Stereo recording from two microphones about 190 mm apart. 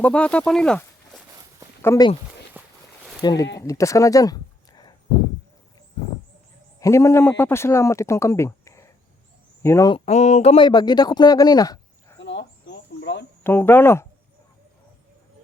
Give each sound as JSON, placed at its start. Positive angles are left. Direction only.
{"t": 0.0, "sound": "speech", "side_deg": 5}
{"t": 1.3, "sound": "walk", "side_deg": -20}
{"t": 1.8, "sound": "speech", "side_deg": 15}
{"t": 2.5, "sound": "walk", "side_deg": -10}
{"t": 3.2, "sound": "speech", "side_deg": 20}
{"t": 6.7, "sound": "a man's voice", "side_deg": 15}
{"t": 9.9, "sound": "speech", "side_deg": 35}
{"t": 12.2, "sound": "bird", "side_deg": 70}
{"t": 13.4, "sound": "speech", "side_deg": 10}